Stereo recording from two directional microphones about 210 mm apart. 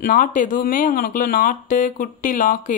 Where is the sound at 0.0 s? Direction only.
40° left (ahead or behind).